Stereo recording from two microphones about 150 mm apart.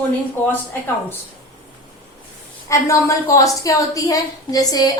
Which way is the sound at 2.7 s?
20° left (ahead or behind).